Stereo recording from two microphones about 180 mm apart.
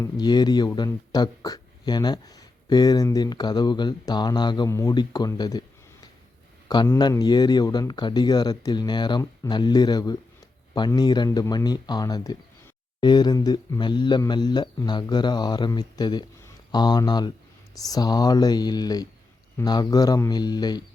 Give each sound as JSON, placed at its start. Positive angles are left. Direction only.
{"t": 0.0, "sound": "speech", "side_deg": 25}
{"t": 6.8, "sound": "speech", "side_deg": 15}